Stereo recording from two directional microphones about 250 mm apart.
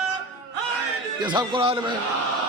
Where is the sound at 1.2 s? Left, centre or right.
Centre.